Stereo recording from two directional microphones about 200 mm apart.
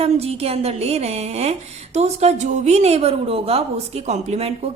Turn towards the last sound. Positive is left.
turn(degrees=-30)  # may be behind; listen again after turning